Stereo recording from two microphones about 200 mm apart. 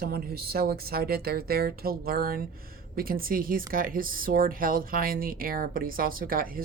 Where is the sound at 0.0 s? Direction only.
50° right (ahead or behind).